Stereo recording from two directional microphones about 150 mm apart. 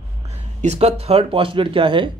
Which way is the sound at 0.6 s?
45° right (ahead or behind).